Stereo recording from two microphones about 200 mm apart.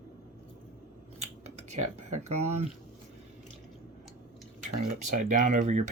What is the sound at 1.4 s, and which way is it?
Finger snapping, 35° right (ahead or behind).